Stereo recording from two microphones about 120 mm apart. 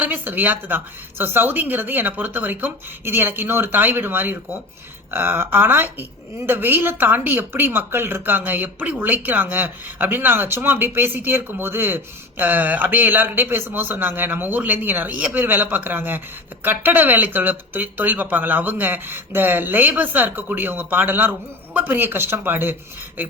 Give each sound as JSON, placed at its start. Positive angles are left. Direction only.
{"t": 0.0, "sound": "a woman's voice", "side_deg": -15}